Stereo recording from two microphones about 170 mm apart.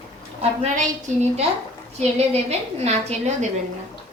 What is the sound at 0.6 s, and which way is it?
A woman's voice, 40° right (ahead or behind).